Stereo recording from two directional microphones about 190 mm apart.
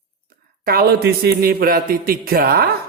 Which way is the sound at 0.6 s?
55° right (ahead or behind).